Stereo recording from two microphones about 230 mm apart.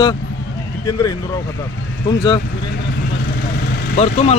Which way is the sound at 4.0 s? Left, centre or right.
Left.